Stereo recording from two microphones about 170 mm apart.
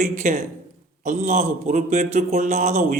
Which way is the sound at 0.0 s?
50° right (ahead or behind).